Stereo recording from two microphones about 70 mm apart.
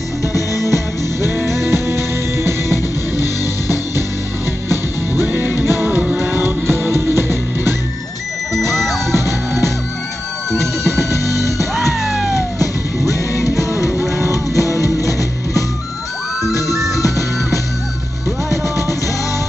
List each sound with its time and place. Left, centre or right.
0.3 s music: left
1.3 s music: right
2.7 s music: left
4.6 s music: right
8.5 s music: centre
10.5 s music: centre
11.1 s music: left
11.7 s music: centre
12.4 s music: left
18.5 s music: left